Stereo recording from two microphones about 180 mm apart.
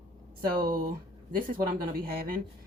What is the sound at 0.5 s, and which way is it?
Speech, 50° right (ahead or behind).